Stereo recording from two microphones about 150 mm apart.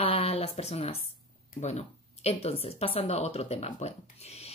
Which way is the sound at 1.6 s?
45° left (ahead or behind).